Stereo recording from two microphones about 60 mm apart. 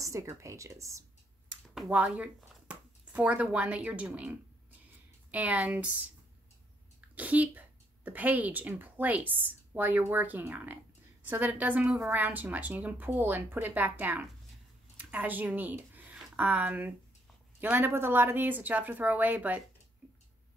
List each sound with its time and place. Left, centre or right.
0.0 s speech: right
1.9 s speech: right
7.2 s speech: right